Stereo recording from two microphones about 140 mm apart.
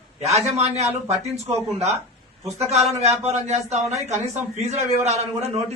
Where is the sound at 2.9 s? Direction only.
50° right (ahead or behind).